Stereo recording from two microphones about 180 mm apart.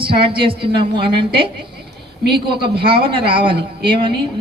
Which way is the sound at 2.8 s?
30° right (ahead or behind).